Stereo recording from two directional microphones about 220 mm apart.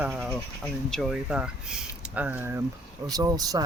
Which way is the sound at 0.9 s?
Centre (ahead or behind).